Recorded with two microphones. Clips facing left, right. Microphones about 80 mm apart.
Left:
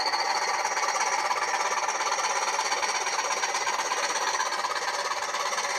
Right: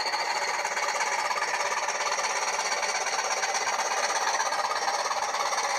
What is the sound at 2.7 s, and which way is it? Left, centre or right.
Engine, centre.